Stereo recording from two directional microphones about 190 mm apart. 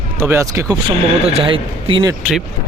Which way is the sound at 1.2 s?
30° right (ahead or behind).